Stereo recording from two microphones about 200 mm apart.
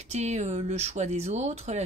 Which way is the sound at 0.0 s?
35° right (ahead or behind).